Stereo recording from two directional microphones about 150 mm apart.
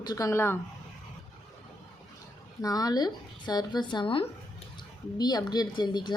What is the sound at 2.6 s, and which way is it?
A woman's voice, 25° left (ahead or behind).